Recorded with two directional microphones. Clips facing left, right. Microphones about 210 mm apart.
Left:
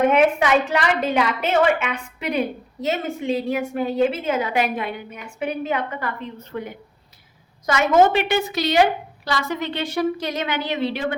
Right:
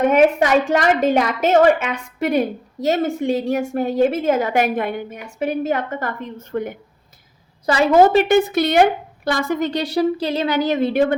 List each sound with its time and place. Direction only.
0.1 s a woman's voice: 40° right (ahead or behind)
7.7 s a woman's voice: 35° right (ahead or behind)